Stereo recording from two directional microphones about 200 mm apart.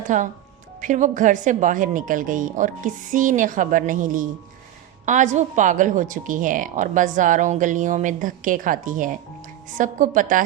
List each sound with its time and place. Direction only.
0.1 s a woman's voice: 40° right (ahead or behind)